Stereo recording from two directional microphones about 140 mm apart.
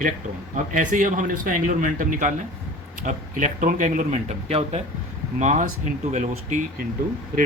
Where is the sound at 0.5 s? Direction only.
65° right (ahead or behind); by 4.8 s 50° right (ahead or behind).